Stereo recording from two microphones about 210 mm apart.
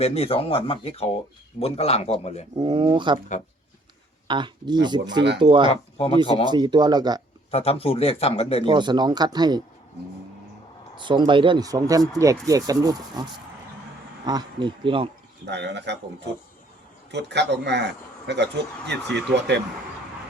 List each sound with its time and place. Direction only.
0.0 s speech: 30° left (ahead or behind)
2.6 s speech: 25° right (ahead or behind)
4.3 s speech: 20° right (ahead or behind)
7.5 s speech: 30° left (ahead or behind)
8.6 s speech: 20° right (ahead or behind)
11.0 s speech: 20° right (ahead or behind)
14.3 s speech: 20° right (ahead or behind)
15.4 s speech: 55° right (ahead or behind)